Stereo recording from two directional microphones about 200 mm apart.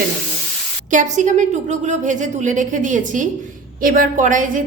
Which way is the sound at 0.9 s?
40° right (ahead or behind).